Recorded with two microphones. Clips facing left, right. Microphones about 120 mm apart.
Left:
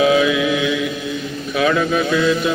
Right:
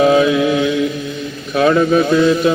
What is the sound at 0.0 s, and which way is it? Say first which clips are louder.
Mantra: right 3 dB; 40° right (ahead or behind).